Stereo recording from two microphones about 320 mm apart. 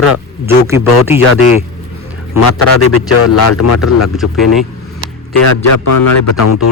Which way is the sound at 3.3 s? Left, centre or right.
Left.